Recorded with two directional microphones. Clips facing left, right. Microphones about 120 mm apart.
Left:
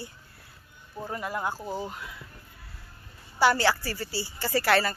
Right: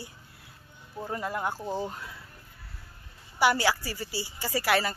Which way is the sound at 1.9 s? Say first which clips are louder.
Left 1 dB; 35° right (ahead or behind).